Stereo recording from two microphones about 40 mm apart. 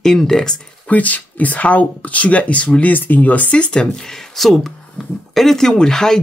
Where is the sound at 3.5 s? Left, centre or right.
Left.